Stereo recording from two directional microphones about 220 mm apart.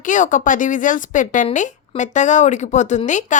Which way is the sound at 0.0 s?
35° left (ahead or behind).